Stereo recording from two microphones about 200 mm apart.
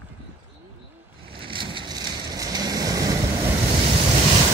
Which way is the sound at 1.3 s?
25° right (ahead or behind).